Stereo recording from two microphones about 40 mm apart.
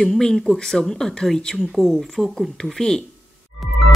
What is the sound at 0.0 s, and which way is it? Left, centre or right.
Speech, centre.